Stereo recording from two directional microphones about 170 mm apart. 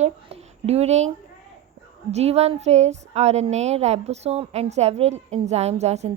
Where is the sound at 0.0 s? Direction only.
35° right (ahead or behind).